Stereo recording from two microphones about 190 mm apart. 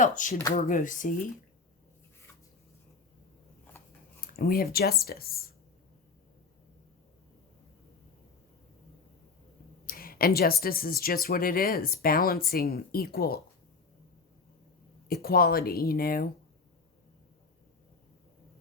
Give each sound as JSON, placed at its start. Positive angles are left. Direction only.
{"t": 0.0, "sound": "speech", "side_deg": 40}
{"t": 4.2, "sound": "speech", "side_deg": 50}
{"t": 9.8, "sound": "speech", "side_deg": 50}
{"t": 15.0, "sound": "speech", "side_deg": 50}